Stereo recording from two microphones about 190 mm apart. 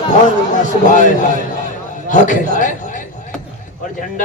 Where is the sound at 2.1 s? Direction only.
40° left (ahead or behind).